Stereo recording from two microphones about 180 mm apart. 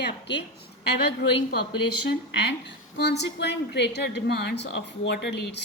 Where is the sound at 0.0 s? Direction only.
70° left (ahead or behind).